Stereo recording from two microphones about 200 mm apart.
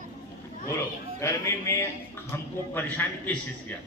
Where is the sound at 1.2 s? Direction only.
15° left (ahead or behind).